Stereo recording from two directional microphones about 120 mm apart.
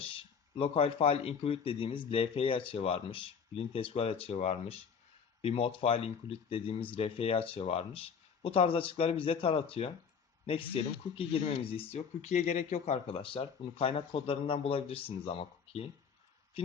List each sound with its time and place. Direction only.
0.0 s speech: 50° left (ahead or behind)